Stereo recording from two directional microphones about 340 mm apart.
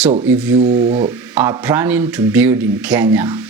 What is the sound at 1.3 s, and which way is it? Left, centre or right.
A man's voice, centre.